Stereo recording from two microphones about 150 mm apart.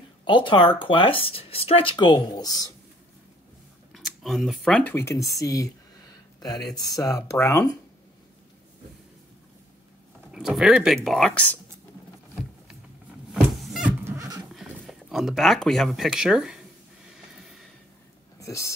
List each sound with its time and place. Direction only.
0.2 s speech: 30° left (ahead or behind)
3.9 s speech: centre (ahead or behind); by 7.7 s 20° left (ahead or behind)
10.3 s speech: 5° right (ahead or behind)
13.3 s power windows: centre (ahead or behind)
14.0 s a sound: 20° right (ahead or behind)
14.5 s speech: centre (ahead or behind)
17.1 s a sound: centre (ahead or behind)
18.4 s speech: 20° left (ahead or behind)